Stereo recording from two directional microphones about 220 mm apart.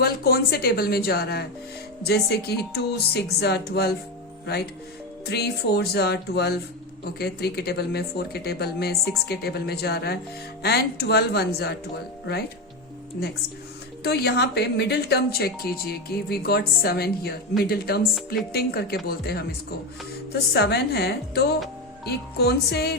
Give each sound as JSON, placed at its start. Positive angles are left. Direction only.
{"t": 0.0, "sound": "speech", "side_deg": 45}
{"t": 14.0, "sound": "speech", "side_deg": 45}
{"t": 20.5, "sound": "speech", "side_deg": 50}